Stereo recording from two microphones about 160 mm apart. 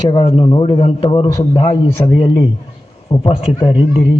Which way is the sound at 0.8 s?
40° left (ahead or behind).